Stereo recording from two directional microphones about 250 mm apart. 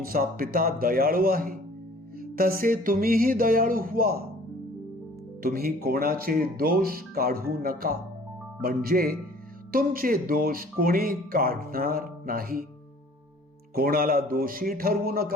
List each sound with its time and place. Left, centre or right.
0.1 s speech: right
5.4 s speech: right
13.7 s speech: right